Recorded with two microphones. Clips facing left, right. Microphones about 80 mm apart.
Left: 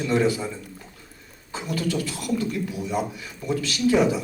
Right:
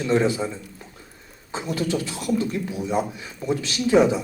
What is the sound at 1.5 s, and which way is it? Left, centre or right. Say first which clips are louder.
A man's voice: right 2 dB; right.